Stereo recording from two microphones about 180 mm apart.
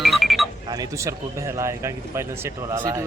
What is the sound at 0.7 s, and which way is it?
Speech, 20° right (ahead or behind).